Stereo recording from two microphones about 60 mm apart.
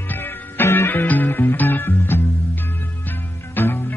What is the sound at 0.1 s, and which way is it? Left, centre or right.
Music, left.